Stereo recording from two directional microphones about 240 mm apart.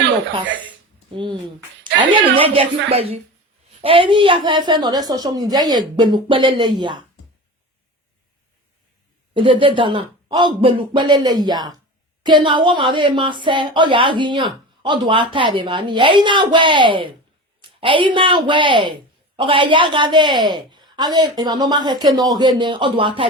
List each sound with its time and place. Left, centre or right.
1.1 s a woman's voice: right
9.3 s a woman's voice: right